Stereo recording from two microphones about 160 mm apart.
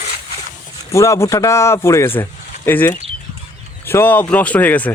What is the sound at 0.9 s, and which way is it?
A man's voice, 20° left (ahead or behind).